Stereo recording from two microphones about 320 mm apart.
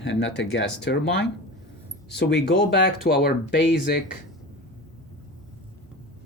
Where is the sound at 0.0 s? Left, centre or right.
Left.